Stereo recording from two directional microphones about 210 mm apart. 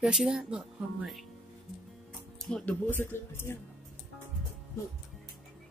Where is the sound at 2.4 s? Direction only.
5° left (ahead or behind).